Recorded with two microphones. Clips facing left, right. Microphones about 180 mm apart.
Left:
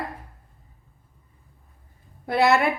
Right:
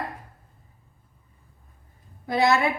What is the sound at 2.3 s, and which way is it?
Speech, 65° left (ahead or behind).